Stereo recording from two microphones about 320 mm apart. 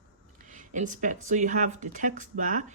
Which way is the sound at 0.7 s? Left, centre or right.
Right.